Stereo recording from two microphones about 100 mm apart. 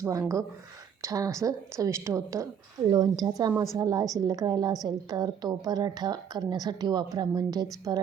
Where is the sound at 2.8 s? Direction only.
45° right (ahead or behind).